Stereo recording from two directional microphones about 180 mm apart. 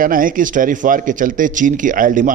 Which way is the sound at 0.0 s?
50° right (ahead or behind).